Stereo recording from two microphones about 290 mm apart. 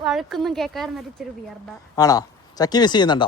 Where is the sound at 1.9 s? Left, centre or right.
Centre.